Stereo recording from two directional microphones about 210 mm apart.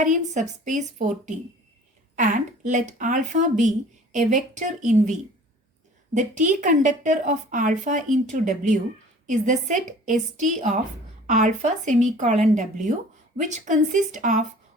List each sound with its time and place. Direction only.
0.0 s a woman's voice: 35° right (ahead or behind)
6.1 s a woman's voice: 35° right (ahead or behind)